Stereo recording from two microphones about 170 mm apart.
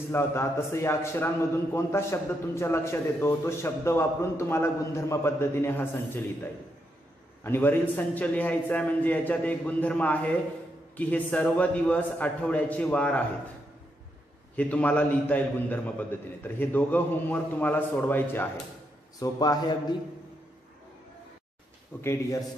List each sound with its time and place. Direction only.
0.1 s a man's voice: 15° left (ahead or behind)
14.5 s a man's voice: 10° left (ahead or behind)
22.0 s a man's voice: 15° left (ahead or behind)